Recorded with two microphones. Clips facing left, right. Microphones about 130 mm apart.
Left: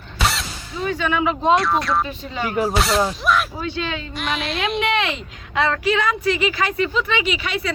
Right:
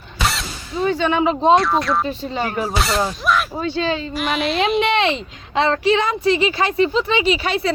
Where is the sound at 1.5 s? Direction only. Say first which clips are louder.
Right 2 dB; centre (ahead or behind).